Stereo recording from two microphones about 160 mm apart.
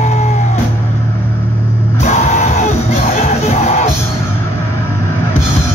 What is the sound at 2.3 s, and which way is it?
Music, 50° left (ahead or behind).